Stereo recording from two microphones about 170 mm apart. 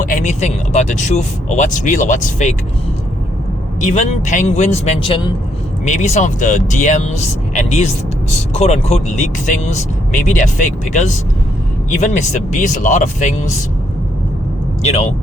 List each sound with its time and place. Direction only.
0.0 s speech: 50° left (ahead or behind)
3.8 s speech: 45° left (ahead or behind); by 5.3 s 30° left (ahead or behind)
5.8 s speech: 45° left (ahead or behind)
14.8 s speech: 40° left (ahead or behind)